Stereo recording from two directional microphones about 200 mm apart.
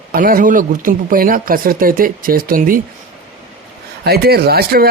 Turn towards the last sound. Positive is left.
turn(degrees=-50)  # may be behind; listen again after turning